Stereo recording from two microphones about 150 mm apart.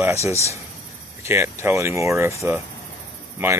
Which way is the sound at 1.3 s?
20° right (ahead or behind).